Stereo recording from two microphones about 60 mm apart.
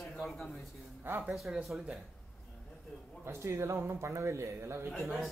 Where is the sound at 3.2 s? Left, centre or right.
Right.